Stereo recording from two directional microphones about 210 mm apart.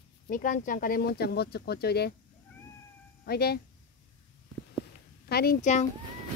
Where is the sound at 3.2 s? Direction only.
50° left (ahead or behind).